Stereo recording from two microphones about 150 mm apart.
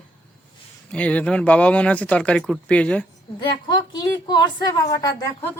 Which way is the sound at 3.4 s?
30° left (ahead or behind).